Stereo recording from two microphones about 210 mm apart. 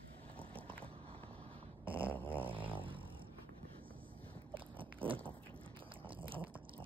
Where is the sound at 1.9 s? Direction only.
10° right (ahead or behind).